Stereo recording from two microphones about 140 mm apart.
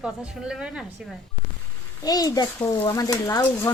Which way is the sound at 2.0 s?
25° left (ahead or behind).